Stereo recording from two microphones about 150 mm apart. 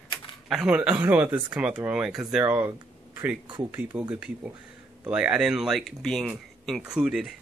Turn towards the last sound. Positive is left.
turn(degrees=-5)  # may be behind; listen again after turning